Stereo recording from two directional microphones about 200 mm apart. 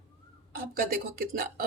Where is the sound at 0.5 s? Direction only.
45° right (ahead or behind).